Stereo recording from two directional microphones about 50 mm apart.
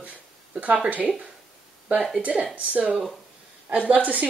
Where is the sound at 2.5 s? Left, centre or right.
Right.